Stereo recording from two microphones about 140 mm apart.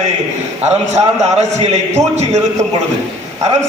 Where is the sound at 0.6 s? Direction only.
55° right (ahead or behind).